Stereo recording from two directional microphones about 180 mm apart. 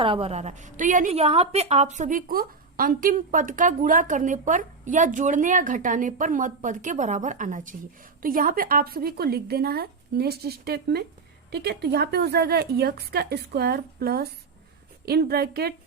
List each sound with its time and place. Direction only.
0.0 s a woman's voice: 30° right (ahead or behind); by 15.7 s 60° right (ahead or behind)